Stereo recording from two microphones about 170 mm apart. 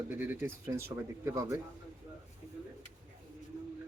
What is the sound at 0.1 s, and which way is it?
Speech, 10° right (ahead or behind).